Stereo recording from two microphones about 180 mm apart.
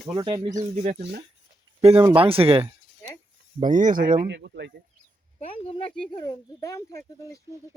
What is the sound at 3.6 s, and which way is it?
Speech, 45° right (ahead or behind).